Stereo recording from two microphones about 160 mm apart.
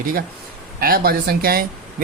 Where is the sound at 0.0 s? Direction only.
65° right (ahead or behind).